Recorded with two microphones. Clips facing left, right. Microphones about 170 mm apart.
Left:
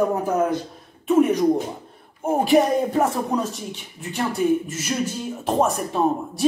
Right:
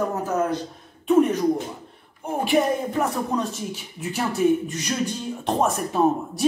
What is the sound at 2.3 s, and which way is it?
Speech, 40° left (ahead or behind).